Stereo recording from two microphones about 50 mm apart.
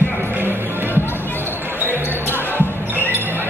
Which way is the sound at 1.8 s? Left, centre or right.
Left.